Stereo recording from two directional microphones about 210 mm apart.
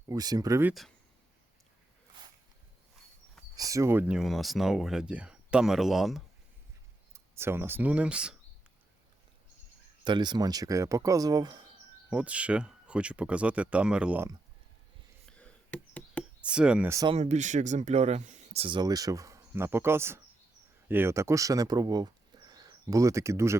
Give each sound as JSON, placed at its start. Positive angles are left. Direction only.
{"t": 0.1, "sound": "speech", "side_deg": -15}
{"t": 0.7, "sound": "speech", "side_deg": 0}
{"t": 3.5, "sound": "speech", "side_deg": -15}
{"t": 7.1, "sound": "speech", "side_deg": -10}
{"t": 10.0, "sound": "speech", "side_deg": -20}
{"t": 12.1, "sound": "speech", "side_deg": -5}
{"t": 15.3, "sound": "a sound", "side_deg": 5}
{"t": 16.4, "sound": "speech", "side_deg": -5}
{"t": 17.2, "sound": "speech", "side_deg": -35}